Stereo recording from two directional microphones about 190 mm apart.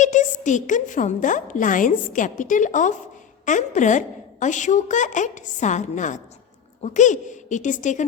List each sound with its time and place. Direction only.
0.0 s a woman's voice: 40° left (ahead or behind)